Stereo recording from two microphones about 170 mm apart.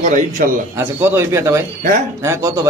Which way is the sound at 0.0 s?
50° right (ahead or behind).